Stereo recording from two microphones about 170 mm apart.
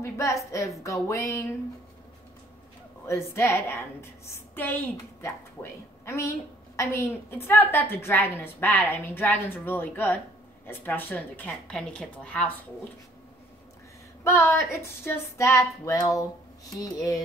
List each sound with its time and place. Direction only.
0.0 s a woman's voice: 15° left (ahead or behind)
3.1 s a woman's voice: 15° left (ahead or behind)
14.2 s a woman's voice: 15° left (ahead or behind)